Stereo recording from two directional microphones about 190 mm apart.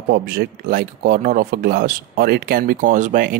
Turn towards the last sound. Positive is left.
turn(degrees=-40)  # may be behind; listen again after turning